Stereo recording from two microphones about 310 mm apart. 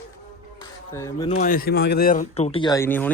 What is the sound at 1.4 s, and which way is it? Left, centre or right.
Speech, left.